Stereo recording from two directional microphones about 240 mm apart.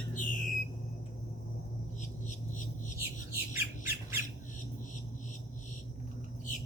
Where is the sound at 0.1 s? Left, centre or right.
Left.